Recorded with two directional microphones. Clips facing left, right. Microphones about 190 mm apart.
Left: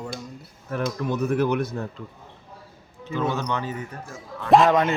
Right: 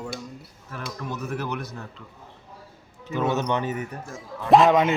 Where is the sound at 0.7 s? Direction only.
55° left (ahead or behind).